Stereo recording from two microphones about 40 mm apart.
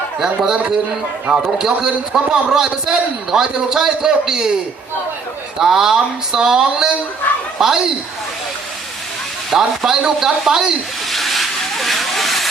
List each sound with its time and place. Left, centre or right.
0.2 s a man's voice: centre
5.5 s a man's voice: centre
9.5 s a man's voice: centre
11.1 s vehicle: centre